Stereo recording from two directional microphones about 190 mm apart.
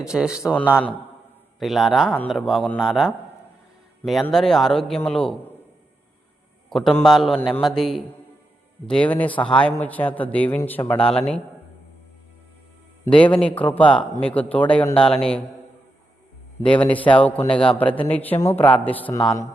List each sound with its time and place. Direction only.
0.0 s a man's voice: 5° right (ahead or behind)
1.5 s a man's voice: centre (ahead or behind)
6.7 s a man's voice: centre (ahead or behind)
13.1 s a man's voice: 5° left (ahead or behind)
16.6 s a man's voice: 5° left (ahead or behind)
19.2 s speech: 20° left (ahead or behind)